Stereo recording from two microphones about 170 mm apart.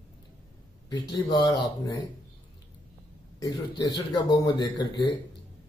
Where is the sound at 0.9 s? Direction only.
25° left (ahead or behind).